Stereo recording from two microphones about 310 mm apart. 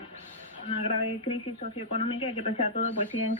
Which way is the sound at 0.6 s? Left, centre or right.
Centre.